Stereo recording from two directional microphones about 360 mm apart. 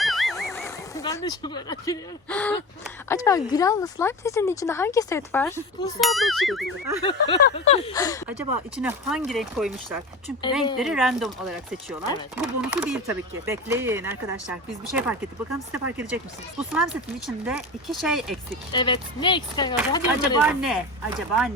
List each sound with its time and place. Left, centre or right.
0.0 s a sound: centre
3.1 s speech: centre
7.0 s speech: centre
8.7 s speech: centre
12.4 s speech: centre
18.7 s speech: centre
20.4 s speech: centre